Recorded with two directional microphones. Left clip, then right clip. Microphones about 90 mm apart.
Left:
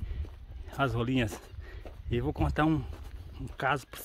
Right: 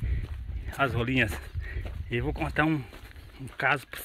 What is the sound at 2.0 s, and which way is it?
Speech, 35° left (ahead or behind).